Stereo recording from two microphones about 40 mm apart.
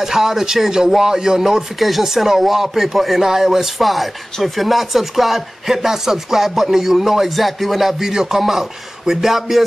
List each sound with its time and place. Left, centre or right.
0.0 s speech: centre
1.8 s speech: centre
2.0 s speech: centre
8.1 s speech: centre
8.4 s speech: centre